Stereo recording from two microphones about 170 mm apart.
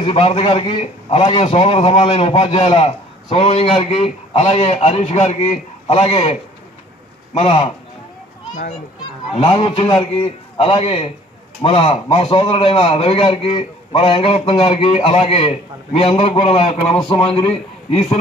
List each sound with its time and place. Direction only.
0.0 s a man's voice: 35° left (ahead or behind)
7.3 s a man's voice: 30° left (ahead or behind)
9.4 s a man's voice: 30° left (ahead or behind)